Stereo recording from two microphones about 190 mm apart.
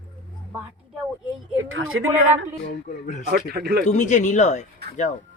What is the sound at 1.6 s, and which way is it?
Speech, 90° right.